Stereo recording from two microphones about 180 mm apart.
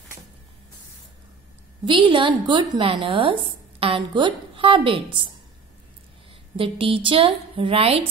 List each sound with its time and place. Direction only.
1.9 s a woman's voice: 30° right (ahead or behind)
6.5 s a woman's voice: 30° right (ahead or behind)